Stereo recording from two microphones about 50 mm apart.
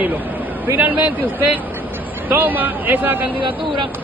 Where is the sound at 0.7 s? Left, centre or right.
Right.